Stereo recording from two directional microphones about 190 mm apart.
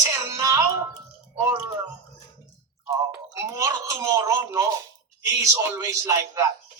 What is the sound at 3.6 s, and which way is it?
Speech, 15° right (ahead or behind).